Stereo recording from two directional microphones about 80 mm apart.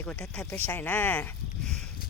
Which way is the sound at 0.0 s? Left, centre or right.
Centre.